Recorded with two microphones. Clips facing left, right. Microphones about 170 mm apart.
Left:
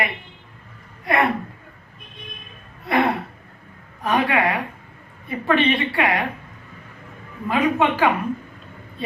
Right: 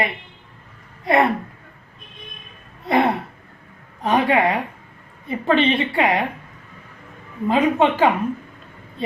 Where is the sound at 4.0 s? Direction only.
25° right (ahead or behind).